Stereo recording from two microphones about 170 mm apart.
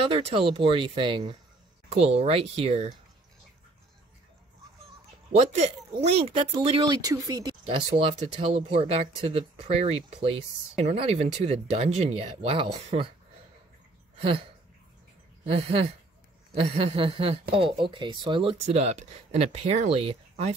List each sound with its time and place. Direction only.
0.1 s speech: 35° right (ahead or behind)
5.3 s speech: 40° right (ahead or behind)
15.4 s speech: 35° right (ahead or behind)